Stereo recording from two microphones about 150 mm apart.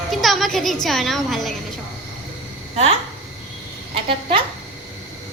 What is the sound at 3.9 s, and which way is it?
Speech, 35° right (ahead or behind).